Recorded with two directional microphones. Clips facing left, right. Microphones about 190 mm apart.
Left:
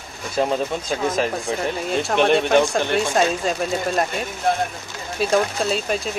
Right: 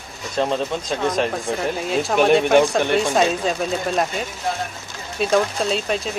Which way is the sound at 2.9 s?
Centre (ahead or behind).